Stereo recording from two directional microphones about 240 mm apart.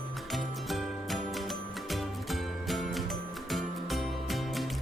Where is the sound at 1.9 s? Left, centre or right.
Centre.